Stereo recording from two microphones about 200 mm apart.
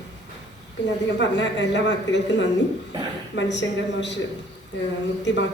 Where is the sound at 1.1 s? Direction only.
60° left (ahead or behind).